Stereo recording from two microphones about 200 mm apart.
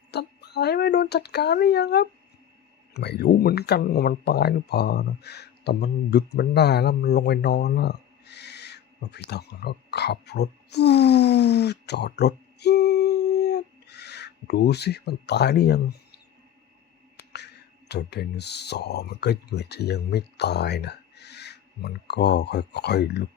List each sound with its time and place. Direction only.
0.1 s speech: 55° left (ahead or behind)
17.3 s speech: 55° left (ahead or behind)